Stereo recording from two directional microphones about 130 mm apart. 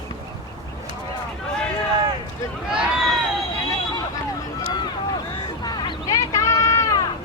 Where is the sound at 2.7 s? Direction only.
5° right (ahead or behind).